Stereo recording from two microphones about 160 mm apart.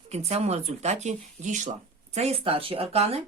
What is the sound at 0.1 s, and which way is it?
Speech, 40° right (ahead or behind).